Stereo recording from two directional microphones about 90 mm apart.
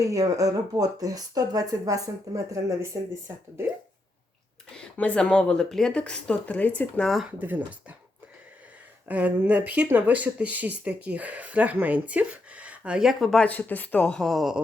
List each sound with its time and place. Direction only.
0.0 s speech: 40° right (ahead or behind)
4.8 s speech: 15° left (ahead or behind)
7.0 s speech: centre (ahead or behind)
9.0 s speech: 20° right (ahead or behind); by 13.4 s centre (ahead or behind)
13.4 s speech: 20° left (ahead or behind); by 14.6 s centre (ahead or behind)